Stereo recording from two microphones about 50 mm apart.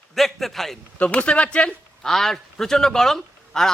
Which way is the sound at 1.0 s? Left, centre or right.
Left.